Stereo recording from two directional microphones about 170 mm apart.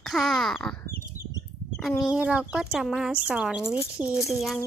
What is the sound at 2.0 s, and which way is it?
Speech, 5° right (ahead or behind).